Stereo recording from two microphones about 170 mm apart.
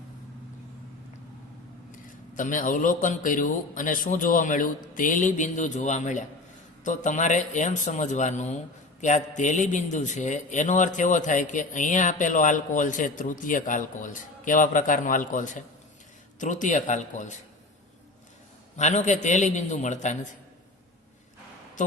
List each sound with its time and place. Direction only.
1.9 s a man's voice: 50° left (ahead or behind)
18.8 s a man's voice: 45° left (ahead or behind)